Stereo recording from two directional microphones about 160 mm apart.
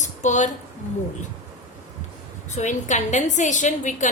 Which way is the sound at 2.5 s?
50° left (ahead or behind).